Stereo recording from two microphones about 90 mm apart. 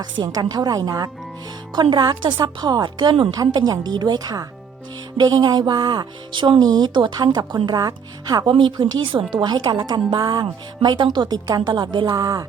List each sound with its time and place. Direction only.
0.0 s speech: 50° right (ahead or behind)
1.7 s speech: 60° right (ahead or behind)
8.4 s a woman's voice: 65° right (ahead or behind); by 10.4 s 50° right (ahead or behind)
10.4 s a woman's voice: 60° right (ahead or behind)
12.1 s speech: 45° right (ahead or behind)